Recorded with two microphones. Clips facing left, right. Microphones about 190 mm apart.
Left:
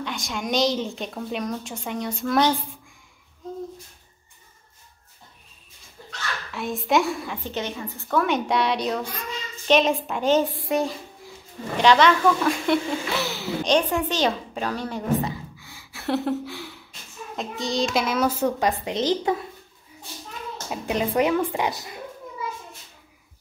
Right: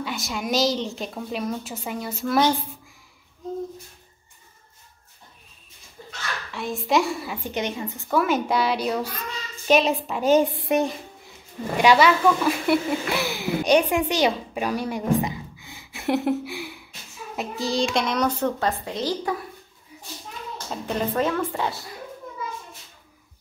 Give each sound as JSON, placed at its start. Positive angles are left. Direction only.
{"t": 0.0, "sound": "a woman's voice", "side_deg": -5}
{"t": 6.5, "sound": "a woman's voice", "side_deg": 0}
{"t": 8.2, "sound": "a woman's voice", "side_deg": 0}
{"t": 10.6, "sound": "a child's voice", "side_deg": -20}
{"t": 11.7, "sound": "a woman's voice", "side_deg": -10}
{"t": 20.7, "sound": "speech", "side_deg": 10}